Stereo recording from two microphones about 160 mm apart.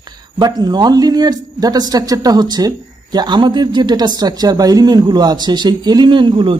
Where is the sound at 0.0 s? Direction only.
25° right (ahead or behind).